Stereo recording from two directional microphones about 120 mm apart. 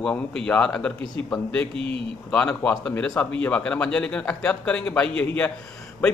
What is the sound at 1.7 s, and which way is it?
Speech, 50° right (ahead or behind).